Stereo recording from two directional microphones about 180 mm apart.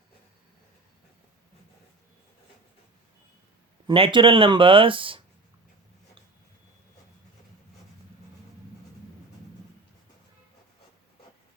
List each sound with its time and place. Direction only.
3.8 s speech: 30° right (ahead or behind)